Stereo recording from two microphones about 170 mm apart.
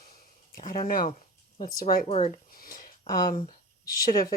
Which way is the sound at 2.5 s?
55° left (ahead or behind).